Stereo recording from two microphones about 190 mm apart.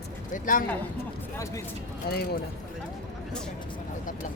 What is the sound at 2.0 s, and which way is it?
Speech, 55° left (ahead or behind).